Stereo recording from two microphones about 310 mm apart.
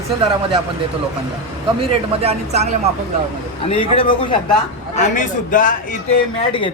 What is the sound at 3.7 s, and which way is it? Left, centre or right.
A man's voice, centre.